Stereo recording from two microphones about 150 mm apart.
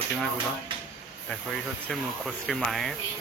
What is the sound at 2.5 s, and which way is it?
Speech, centre (ahead or behind).